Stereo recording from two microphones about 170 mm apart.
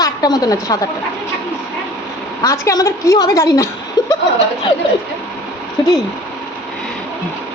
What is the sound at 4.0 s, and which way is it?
Chuckle, 25° left (ahead or behind).